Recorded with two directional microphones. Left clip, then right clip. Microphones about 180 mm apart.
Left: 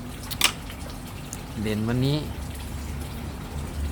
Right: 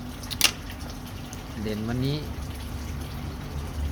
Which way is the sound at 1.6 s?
15° left (ahead or behind).